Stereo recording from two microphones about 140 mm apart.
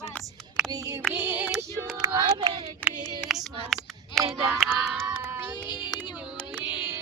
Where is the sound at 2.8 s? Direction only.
10° left (ahead or behind).